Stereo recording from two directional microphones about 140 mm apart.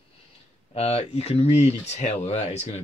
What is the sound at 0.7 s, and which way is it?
Speech, 45° left (ahead or behind).